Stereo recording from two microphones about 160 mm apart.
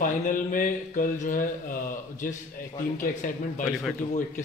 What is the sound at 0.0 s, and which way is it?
A man's voice, 55° left (ahead or behind).